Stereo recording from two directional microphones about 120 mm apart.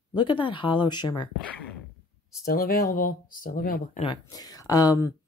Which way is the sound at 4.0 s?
90° left.